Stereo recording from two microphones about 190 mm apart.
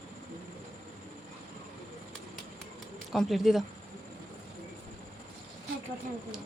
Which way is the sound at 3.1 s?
Centre (ahead or behind).